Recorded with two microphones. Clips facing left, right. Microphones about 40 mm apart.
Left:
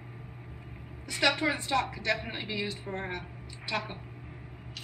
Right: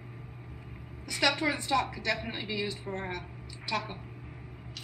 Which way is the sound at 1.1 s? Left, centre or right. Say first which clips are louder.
Left 1 dB; centre.